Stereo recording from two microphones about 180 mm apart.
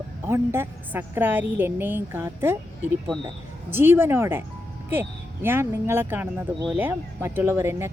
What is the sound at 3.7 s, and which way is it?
Speech, 10° right (ahead or behind).